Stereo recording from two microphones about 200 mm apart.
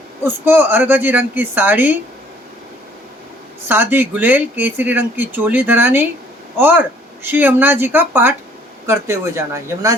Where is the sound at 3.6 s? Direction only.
10° right (ahead or behind).